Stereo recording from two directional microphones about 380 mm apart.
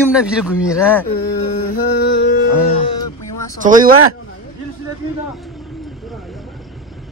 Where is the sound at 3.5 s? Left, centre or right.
Right.